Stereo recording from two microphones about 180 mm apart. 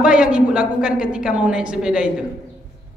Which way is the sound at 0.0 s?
5° right (ahead or behind).